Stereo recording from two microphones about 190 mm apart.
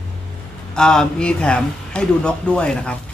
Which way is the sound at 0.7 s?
5° left (ahead or behind).